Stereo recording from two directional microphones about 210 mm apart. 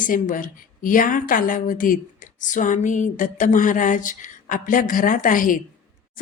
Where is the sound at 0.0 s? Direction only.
40° left (ahead or behind).